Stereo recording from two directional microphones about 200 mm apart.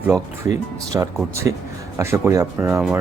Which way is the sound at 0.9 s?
15° right (ahead or behind).